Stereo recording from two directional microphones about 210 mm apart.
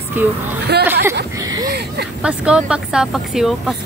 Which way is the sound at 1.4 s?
15° right (ahead or behind).